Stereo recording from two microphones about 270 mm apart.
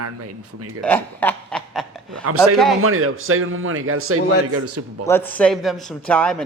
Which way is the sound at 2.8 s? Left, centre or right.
Right.